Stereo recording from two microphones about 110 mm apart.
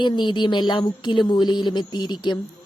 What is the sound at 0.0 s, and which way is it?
A woman's voice, 45° left (ahead or behind).